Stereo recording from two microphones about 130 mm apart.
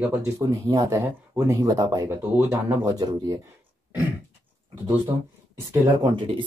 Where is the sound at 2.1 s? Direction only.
15° right (ahead or behind).